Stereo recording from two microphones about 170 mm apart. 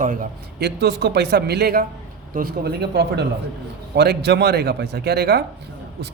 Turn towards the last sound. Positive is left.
turn(degrees=-70)  # may be behind; listen again after turning